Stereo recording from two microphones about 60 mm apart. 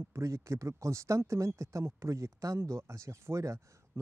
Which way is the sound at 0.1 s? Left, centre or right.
Right.